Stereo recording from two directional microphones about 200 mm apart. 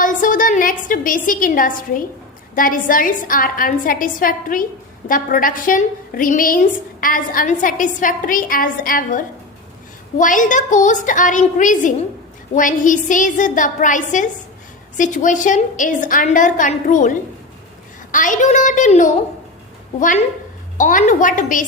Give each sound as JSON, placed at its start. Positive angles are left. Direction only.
{"t": 0.0, "sound": "a woman's voice", "side_deg": 40}